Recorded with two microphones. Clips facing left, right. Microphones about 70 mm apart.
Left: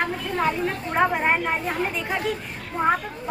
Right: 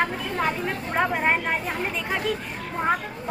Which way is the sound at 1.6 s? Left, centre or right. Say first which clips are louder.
Left 2 dB; centre.